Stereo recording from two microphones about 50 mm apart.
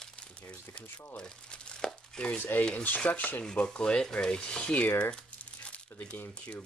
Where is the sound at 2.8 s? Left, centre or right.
Left.